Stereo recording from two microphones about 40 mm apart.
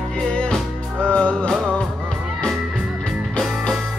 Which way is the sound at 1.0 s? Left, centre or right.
Left.